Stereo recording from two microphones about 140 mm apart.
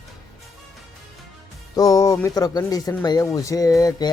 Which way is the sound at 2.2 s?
25° left (ahead or behind).